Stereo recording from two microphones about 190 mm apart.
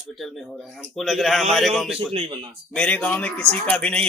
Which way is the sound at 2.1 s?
30° right (ahead or behind).